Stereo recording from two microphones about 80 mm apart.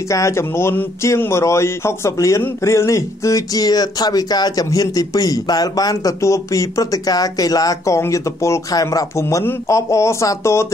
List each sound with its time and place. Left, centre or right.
0.1 s a man's voice: left
6.2 s speech: left
9.4 s speech: left